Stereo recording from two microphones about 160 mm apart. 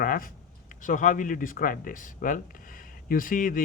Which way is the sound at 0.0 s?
60° left (ahead or behind).